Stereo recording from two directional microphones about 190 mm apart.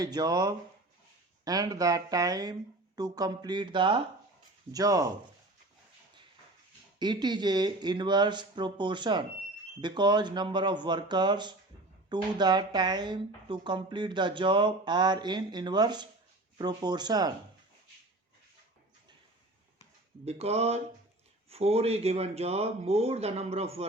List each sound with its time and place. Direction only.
0.0 s a woman's voice: 20° right (ahead or behind)
7.0 s a woman's voice: 25° right (ahead or behind)
20.2 s speech: 35° right (ahead or behind)